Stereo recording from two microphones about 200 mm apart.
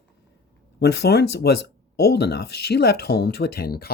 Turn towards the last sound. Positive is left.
turn(degrees=50)  # may be behind; listen again after turning